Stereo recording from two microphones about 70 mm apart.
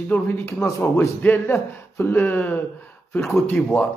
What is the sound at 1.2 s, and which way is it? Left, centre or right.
Speech, left.